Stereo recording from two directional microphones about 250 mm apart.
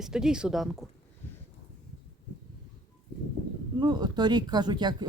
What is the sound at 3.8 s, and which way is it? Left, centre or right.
Speech, centre.